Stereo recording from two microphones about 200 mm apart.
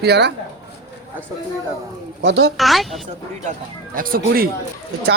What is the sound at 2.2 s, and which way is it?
Speech, 65° right (ahead or behind).